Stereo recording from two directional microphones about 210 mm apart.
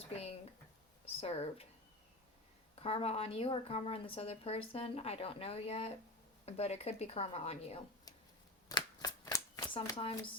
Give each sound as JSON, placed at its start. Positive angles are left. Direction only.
{"t": 0.1, "sound": "a sound", "side_deg": 30}
{"t": 1.0, "sound": "speech", "side_deg": 30}
{"t": 2.8, "sound": "a woman's voice", "side_deg": 30}
{"t": 8.7, "sound": "shuffling cards", "side_deg": 15}